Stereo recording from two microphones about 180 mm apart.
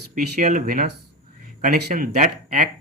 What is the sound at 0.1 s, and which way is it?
Speech, 45° right (ahead or behind).